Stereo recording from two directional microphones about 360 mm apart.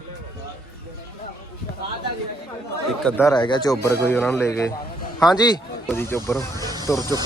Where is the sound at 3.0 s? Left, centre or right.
Centre.